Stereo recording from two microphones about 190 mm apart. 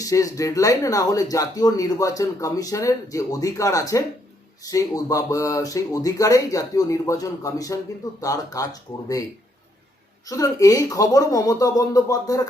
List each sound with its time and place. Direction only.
0.0 s speech: 15° left (ahead or behind)
10.2 s speech: 20° left (ahead or behind)